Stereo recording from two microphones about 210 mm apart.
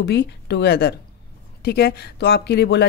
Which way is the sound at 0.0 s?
55° left (ahead or behind).